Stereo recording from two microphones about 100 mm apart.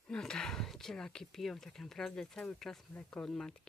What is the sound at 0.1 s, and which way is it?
Speech, 5° left (ahead or behind).